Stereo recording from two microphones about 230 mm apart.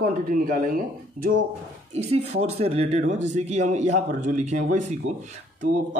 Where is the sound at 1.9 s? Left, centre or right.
Right.